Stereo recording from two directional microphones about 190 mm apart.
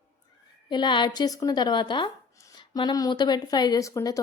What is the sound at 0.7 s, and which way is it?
Speech, 25° left (ahead or behind).